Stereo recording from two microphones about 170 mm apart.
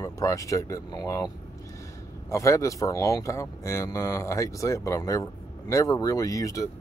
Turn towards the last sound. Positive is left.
turn(degrees=20)  # may be behind; listen again after turning